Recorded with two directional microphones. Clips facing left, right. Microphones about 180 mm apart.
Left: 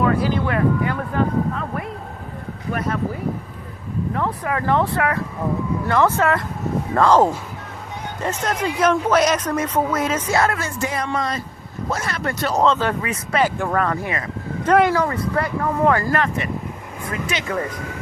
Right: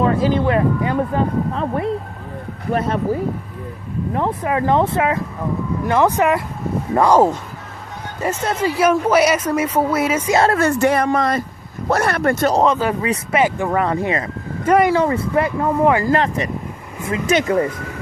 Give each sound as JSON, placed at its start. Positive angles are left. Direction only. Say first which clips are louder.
{"t": 0.0, "sound": "speech", "louder": "right 3 dB", "side_deg": -20}
{"t": 4.1, "sound": "speech", "louder": "right 5 dB", "side_deg": -20}
{"t": 10.3, "sound": "speech", "louder": "right 4 dB", "side_deg": -30}
{"t": 10.6, "sound": "speech", "louder": "right 10 dB", "side_deg": -65}
{"t": 12.6, "sound": "speech", "louder": "right 2 dB", "side_deg": -10}
{"t": 13.0, "sound": "speech", "louder": "right 3 dB", "side_deg": -20}
{"t": 14.6, "sound": "speech", "louder": "right 1 dB", "side_deg": -10}
{"t": 14.9, "sound": "speech", "louder": "right 4 dB", "side_deg": -25}
{"t": 16.1, "sound": "speech", "louder": "right 3 dB", "side_deg": -30}
{"t": 17.3, "sound": "speech", "louder": "right 12 dB", "side_deg": -45}